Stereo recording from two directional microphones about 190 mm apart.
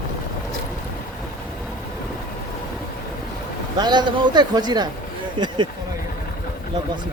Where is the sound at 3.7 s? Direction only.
20° right (ahead or behind).